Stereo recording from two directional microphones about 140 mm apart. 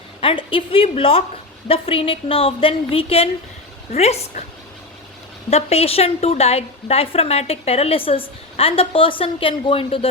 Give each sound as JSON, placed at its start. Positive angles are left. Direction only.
{"t": 0.2, "sound": "a woman's voice", "side_deg": 40}
{"t": 5.5, "sound": "a woman's voice", "side_deg": 50}